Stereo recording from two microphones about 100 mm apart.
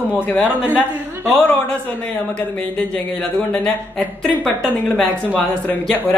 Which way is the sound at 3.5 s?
5° left (ahead or behind).